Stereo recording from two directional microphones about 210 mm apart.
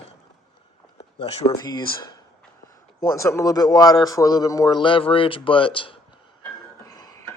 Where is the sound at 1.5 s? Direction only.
20° left (ahead or behind).